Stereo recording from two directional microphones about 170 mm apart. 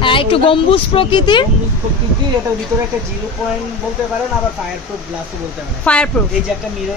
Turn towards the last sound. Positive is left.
turn(degrees=5)  # may be behind; listen again after turning